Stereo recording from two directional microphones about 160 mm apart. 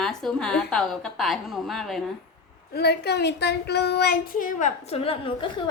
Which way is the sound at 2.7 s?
90° left.